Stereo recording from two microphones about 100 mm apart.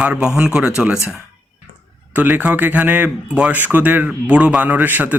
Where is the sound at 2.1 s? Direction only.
15° right (ahead or behind).